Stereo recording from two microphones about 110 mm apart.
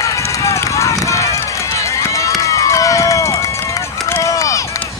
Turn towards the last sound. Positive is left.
turn(degrees=30)  # may be behind; listen again after turning